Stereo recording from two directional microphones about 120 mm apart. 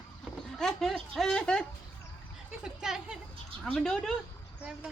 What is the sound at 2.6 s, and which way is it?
Speech, 5° right (ahead or behind).